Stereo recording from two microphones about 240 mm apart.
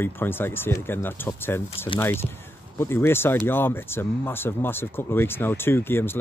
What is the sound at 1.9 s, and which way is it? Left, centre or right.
Speech, left.